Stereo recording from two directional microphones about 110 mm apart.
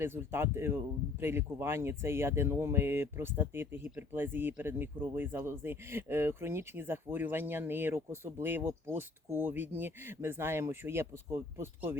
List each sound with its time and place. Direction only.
0.0 s speech: 20° right (ahead or behind)